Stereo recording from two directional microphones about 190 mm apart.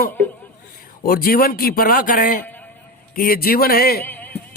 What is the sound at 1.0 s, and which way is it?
A man's voice, 50° left (ahead or behind).